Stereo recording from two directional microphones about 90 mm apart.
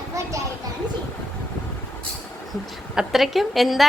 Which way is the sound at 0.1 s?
35° right (ahead or behind).